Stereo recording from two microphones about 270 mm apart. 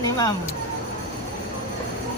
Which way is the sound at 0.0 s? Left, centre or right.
Centre.